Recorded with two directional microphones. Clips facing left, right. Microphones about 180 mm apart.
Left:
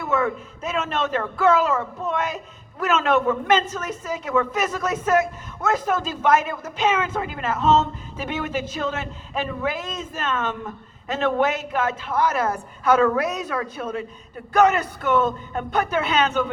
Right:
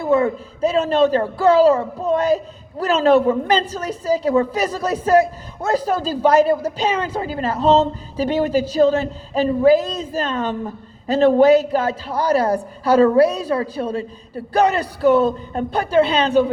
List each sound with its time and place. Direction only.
0.0 s a man's voice: 35° right (ahead or behind)